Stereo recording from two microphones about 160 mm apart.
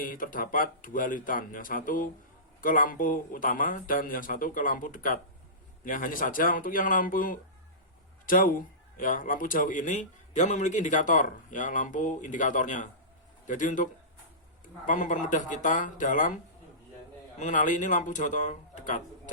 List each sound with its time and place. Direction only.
0.0 s speech: 60° left (ahead or behind)